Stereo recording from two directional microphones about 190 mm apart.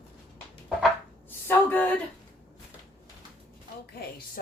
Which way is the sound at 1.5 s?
10° left (ahead or behind).